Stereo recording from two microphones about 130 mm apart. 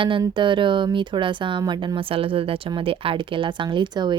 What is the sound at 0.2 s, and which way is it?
Speech, 40° right (ahead or behind).